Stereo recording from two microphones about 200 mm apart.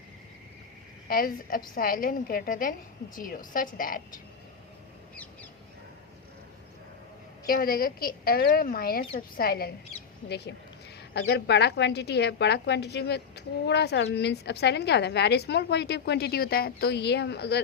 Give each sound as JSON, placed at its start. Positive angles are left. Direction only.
{"t": 1.0, "sound": "a woman's voice", "side_deg": 45}
{"t": 5.1, "sound": "a sound", "side_deg": 5}
{"t": 7.4, "sound": "a woman's voice", "side_deg": 45}